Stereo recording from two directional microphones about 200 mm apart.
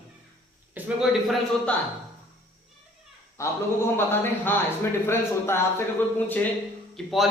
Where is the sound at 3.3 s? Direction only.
15° left (ahead or behind).